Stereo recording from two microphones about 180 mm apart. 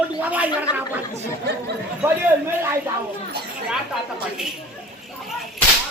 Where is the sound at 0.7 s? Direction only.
25° left (ahead or behind).